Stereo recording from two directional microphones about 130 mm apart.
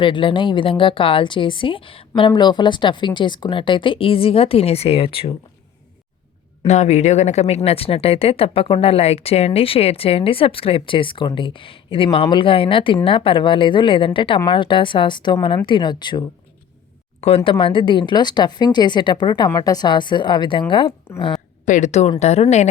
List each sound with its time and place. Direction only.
0.0 s speech: 40° left (ahead or behind)
6.7 s speech: 60° left (ahead or behind); by 16.2 s 35° left (ahead or behind)
17.2 s speech: 55° left (ahead or behind)
21.6 s speech: 65° left (ahead or behind)